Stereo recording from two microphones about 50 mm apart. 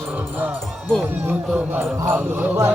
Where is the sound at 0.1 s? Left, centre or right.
Right.